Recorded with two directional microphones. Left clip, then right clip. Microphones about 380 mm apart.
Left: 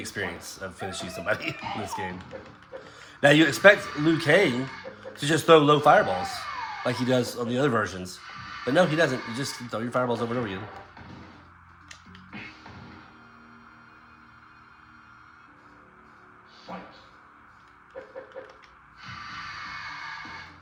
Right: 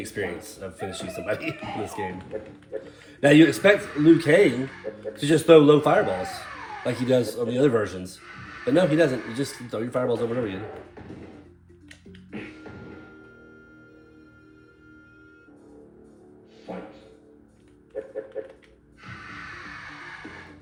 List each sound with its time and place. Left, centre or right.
0.0 s speech: centre